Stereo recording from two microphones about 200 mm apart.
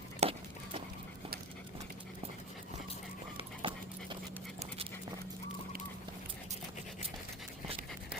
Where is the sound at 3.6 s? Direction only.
25° right (ahead or behind).